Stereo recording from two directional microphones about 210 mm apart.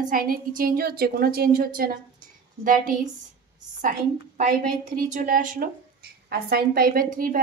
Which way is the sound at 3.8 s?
40° right (ahead or behind).